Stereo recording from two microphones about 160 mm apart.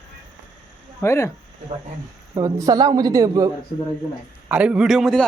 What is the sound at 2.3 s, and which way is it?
Speech, 20° right (ahead or behind).